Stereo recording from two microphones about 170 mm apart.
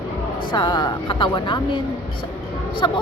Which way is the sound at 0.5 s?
25° left (ahead or behind).